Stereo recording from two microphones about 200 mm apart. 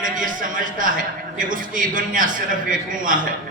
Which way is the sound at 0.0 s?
40° right (ahead or behind).